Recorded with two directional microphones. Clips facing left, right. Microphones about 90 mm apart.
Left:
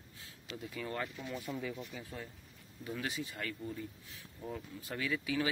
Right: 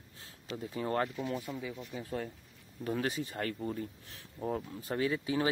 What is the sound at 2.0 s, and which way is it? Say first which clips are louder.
Speech: right 8 dB; 45° right (ahead or behind).